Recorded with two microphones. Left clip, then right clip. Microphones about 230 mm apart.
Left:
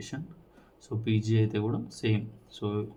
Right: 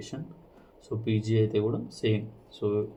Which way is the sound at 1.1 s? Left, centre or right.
Left.